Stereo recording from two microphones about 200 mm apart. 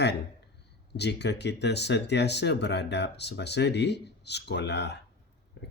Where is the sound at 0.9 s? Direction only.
60° left (ahead or behind).